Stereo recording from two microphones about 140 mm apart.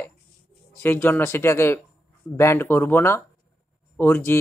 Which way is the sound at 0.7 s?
15° left (ahead or behind).